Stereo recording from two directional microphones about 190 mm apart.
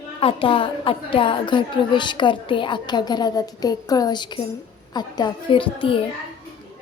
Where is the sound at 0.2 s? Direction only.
30° left (ahead or behind).